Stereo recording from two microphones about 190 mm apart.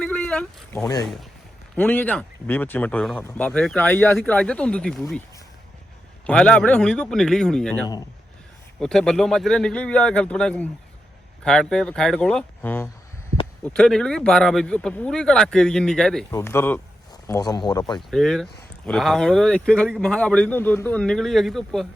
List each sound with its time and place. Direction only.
0.0 s a sound: 5° left (ahead or behind)
0.8 s speech: 20° left (ahead or behind)
1.7 s speech: 10° left (ahead or behind)
6.2 s speech: 5° left (ahead or behind)
16.3 s speech: 15° left (ahead or behind)
18.1 s speech: centre (ahead or behind)